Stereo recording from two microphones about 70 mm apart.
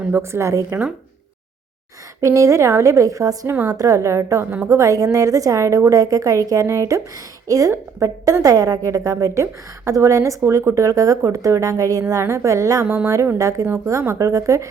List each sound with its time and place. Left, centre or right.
0.1 s a woman's voice: right
2.2 s a woman's voice: right
4.7 s a woman's voice: right